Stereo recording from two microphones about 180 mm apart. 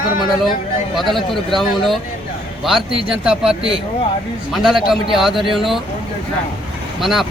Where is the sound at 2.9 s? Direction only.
30° right (ahead or behind).